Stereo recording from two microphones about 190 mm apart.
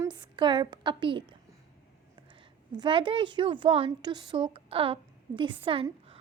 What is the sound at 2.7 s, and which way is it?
A child's voice, 25° right (ahead or behind).